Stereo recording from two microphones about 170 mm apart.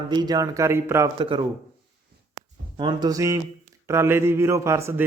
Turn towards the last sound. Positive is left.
turn(degrees=-15)  # may be behind; listen again after turning